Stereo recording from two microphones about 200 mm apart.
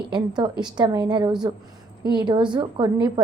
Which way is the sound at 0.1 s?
20° right (ahead or behind).